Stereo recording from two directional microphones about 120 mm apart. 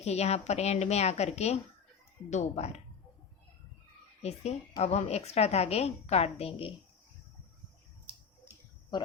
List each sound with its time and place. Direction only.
0.0 s a woman's voice: 65° left (ahead or behind)
4.2 s a woman's voice: 65° left (ahead or behind)
8.9 s speech: 35° left (ahead or behind)